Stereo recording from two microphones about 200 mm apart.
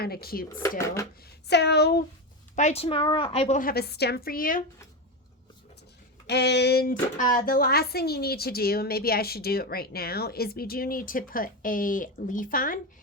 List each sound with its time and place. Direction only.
0.0 s speech: 50° left (ahead or behind)
0.4 s speech: 15° left (ahead or behind)
1.2 s speech: 55° left (ahead or behind)
2.6 s a woman's voice: 35° left (ahead or behind)
3.6 s speech: 50° left (ahead or behind)
6.2 s speech: 55° left (ahead or behind)